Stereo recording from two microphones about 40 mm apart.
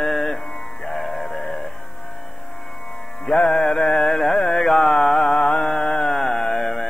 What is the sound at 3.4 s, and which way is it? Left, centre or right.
Music, left.